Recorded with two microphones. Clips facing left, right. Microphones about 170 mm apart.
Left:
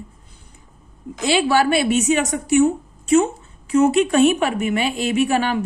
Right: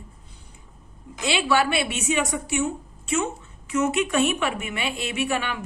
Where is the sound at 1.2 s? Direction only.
40° left (ahead or behind).